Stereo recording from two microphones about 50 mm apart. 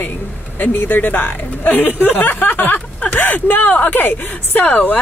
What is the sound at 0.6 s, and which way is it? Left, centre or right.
Speech, left.